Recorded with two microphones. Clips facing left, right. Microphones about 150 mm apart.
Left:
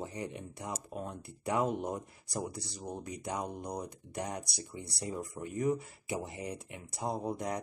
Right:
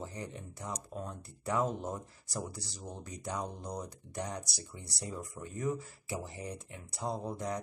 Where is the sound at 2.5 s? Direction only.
60° left (ahead or behind).